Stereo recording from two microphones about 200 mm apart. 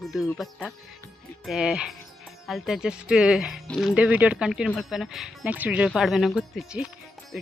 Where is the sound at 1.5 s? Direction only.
5° right (ahead or behind).